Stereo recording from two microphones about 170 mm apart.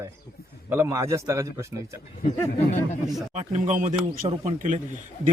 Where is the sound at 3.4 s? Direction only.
45° right (ahead or behind).